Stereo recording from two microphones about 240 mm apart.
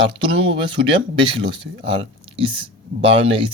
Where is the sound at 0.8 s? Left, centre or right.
Right.